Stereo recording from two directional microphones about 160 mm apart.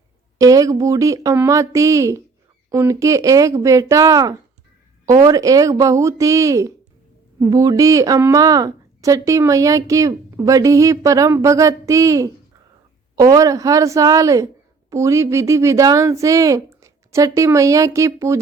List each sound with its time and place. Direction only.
0.3 s a woman's voice: 20° right (ahead or behind)